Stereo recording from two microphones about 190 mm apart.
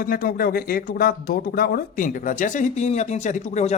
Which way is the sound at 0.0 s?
50° left (ahead or behind).